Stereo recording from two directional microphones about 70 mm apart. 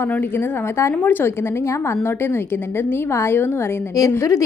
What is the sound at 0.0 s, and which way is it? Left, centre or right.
A woman's voice, left.